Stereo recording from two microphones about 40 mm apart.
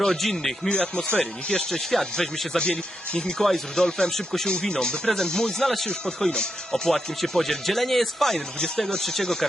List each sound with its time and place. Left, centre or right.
0.0 s speech: centre
0.7 s speech: left
1.7 s speech: centre
2.6 s speech: left; by 8.4 s centre
8.5 s speech: left
8.9 s speech: centre